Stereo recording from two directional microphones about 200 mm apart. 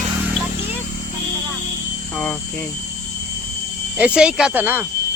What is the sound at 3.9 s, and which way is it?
Speech, 5° right (ahead or behind).